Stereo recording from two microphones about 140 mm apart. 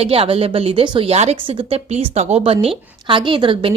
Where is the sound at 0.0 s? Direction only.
45° right (ahead or behind).